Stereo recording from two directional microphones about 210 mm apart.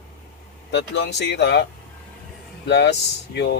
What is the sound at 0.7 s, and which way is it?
Speech, 55° left (ahead or behind).